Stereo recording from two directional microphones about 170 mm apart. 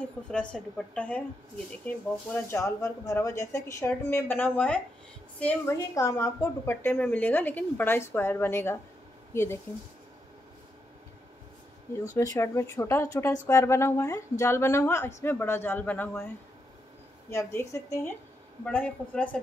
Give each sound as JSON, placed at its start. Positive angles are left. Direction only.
{"t": 0.0, "sound": "a woman's voice", "side_deg": 5}
{"t": 12.2, "sound": "a woman's voice", "side_deg": 20}
{"t": 17.3, "sound": "a woman's voice", "side_deg": 15}